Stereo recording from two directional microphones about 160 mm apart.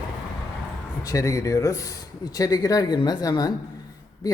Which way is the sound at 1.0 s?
20° left (ahead or behind).